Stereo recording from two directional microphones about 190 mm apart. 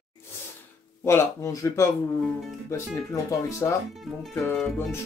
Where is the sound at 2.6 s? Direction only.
15° left (ahead or behind).